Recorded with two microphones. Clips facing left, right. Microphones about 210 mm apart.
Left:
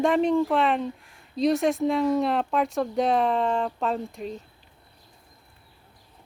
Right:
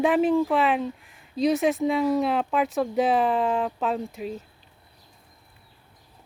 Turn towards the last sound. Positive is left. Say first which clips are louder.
# right 1 dB
turn(degrees=-5)  # may be behind; listen again after turning